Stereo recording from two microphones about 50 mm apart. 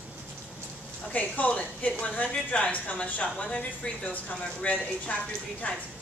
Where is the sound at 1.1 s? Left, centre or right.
Left.